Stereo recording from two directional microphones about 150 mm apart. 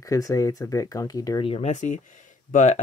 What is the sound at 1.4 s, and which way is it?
Speech, 45° left (ahead or behind).